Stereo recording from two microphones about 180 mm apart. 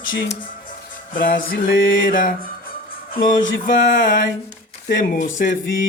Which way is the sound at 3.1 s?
50° left (ahead or behind).